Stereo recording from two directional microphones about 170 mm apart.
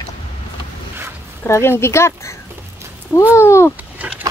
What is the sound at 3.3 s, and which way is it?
Speech, 15° left (ahead or behind).